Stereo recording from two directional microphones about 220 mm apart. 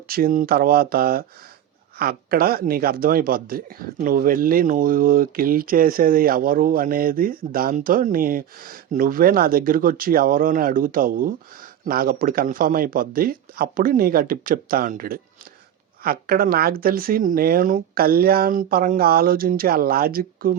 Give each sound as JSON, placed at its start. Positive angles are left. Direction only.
{"t": 0.1, "sound": "speech", "side_deg": -40}